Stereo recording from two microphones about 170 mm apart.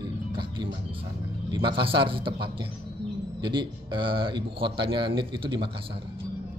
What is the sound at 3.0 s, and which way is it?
Bird, 90° right.